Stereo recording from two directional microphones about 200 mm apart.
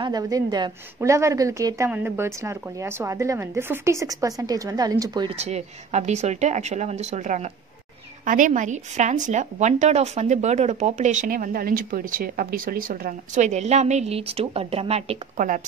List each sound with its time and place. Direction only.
0.0 s a woman's voice: 20° right (ahead or behind)
5.4 s a woman's voice: 35° right (ahead or behind)